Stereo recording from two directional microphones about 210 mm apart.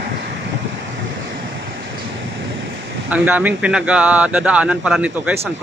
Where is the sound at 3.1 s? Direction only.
5° right (ahead or behind).